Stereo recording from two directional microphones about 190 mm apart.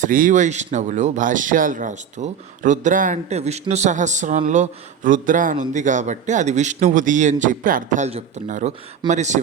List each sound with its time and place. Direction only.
0.0 s speech: 45° right (ahead or behind)